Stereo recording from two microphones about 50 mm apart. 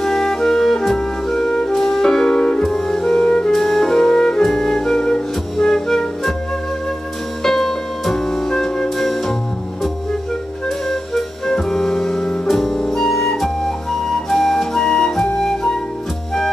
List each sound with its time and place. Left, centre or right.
0.0 s music: centre
3.5 s music: centre
7.4 s music: centre
10.9 s music: centre
14.3 s flute: centre